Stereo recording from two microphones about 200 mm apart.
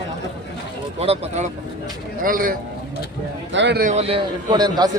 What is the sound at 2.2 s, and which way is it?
Speech, 45° right (ahead or behind).